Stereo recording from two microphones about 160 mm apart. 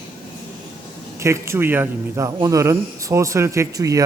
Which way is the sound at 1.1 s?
15° right (ahead or behind).